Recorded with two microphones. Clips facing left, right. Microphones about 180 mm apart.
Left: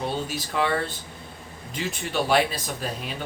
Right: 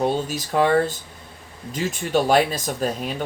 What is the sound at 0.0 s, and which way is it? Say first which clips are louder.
Speech: right 6 dB; 45° right (ahead or behind).